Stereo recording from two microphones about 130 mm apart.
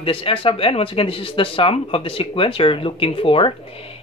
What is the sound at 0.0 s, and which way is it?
Speech, 45° left (ahead or behind).